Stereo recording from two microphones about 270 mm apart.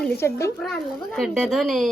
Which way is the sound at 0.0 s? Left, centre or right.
Centre.